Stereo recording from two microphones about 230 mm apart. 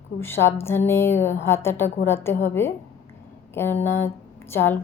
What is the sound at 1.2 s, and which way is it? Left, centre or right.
Speech, left.